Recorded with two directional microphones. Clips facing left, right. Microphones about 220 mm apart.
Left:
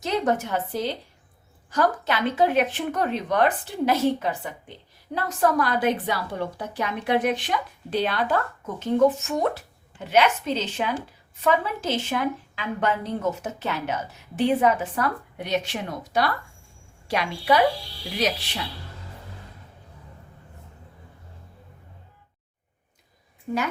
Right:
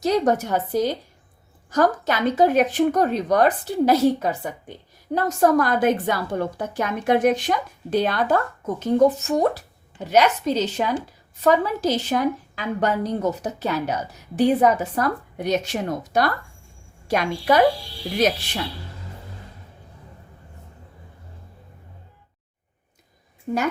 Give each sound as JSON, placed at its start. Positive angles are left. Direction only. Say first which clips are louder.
{"t": 0.0, "sound": "a woman's voice", "louder": "right 4 dB", "side_deg": -40}